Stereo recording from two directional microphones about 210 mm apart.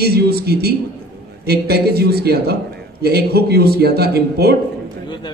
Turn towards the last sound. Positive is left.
turn(degrees=-50)  # may be behind; listen again after turning